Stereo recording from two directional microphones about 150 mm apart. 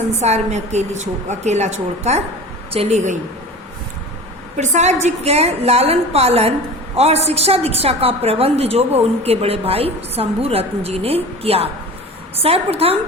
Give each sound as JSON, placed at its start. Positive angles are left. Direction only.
{"t": 0.2, "sound": "a woman's voice", "side_deg": -45}
{"t": 4.5, "sound": "a woman's voice", "side_deg": -50}